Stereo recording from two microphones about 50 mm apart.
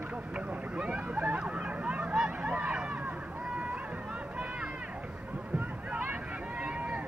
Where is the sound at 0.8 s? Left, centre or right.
Right.